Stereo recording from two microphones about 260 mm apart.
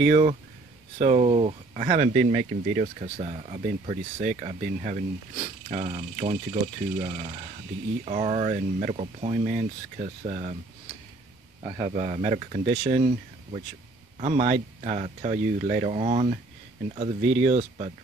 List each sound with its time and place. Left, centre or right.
0.0 s speech: right
11.6 s speech: centre